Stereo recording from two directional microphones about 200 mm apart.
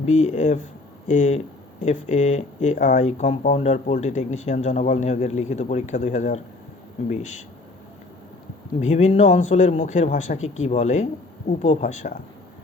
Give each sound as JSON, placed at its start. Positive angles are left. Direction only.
{"t": 0.0, "sound": "speech", "side_deg": 35}
{"t": 8.8, "sound": "speech", "side_deg": 35}